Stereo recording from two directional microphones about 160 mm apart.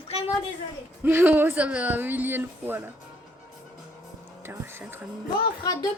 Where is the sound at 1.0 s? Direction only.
10° right (ahead or behind).